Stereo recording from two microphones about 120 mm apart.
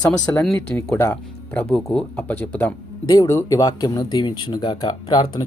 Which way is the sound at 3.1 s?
35° left (ahead or behind).